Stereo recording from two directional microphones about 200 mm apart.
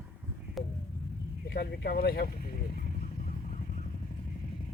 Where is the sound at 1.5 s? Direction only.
50° left (ahead or behind).